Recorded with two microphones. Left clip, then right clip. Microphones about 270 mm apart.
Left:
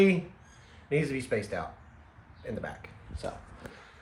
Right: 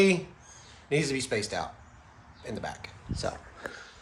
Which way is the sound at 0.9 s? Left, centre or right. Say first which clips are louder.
Right 1 dB; centre.